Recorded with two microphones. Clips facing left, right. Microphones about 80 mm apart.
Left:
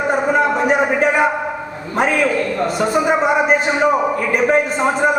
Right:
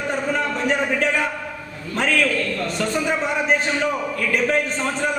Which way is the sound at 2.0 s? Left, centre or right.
Centre.